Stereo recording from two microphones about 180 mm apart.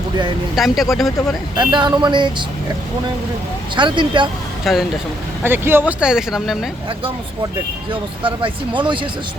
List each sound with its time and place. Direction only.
0.5 s speech: centre (ahead or behind)
1.5 s speech: 25° right (ahead or behind)
3.8 s speech: 25° right (ahead or behind)
4.6 s speech: centre (ahead or behind)
5.4 s speech: 10° right (ahead or behind)
8.2 s speech: 30° right (ahead or behind)